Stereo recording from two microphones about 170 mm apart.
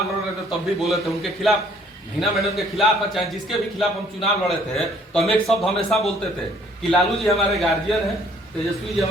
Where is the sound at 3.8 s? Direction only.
Centre (ahead or behind).